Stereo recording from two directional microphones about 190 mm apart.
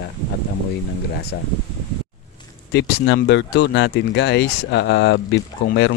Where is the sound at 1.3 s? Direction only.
70° left (ahead or behind).